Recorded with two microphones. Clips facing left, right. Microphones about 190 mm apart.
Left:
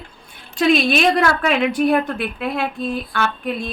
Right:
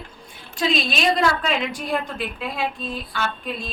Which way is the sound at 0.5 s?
60° left (ahead or behind).